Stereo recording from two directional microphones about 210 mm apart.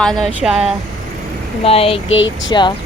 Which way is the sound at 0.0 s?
Centre (ahead or behind).